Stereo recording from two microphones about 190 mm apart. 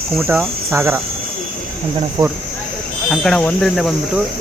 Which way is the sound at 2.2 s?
25° right (ahead or behind).